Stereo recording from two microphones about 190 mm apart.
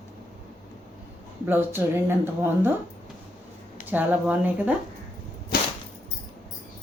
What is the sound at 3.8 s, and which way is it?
Speech, 10° right (ahead or behind).